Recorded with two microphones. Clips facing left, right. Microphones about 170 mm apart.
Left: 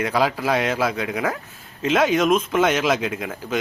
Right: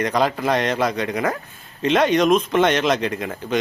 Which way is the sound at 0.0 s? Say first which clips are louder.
Right 1 dB; 5° left (ahead or behind).